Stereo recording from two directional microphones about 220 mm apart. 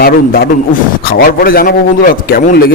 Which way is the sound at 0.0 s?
40° left (ahead or behind).